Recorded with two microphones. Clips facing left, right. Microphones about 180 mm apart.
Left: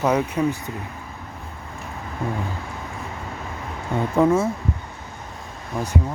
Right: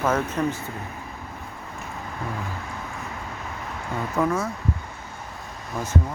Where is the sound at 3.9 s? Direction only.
25° left (ahead or behind).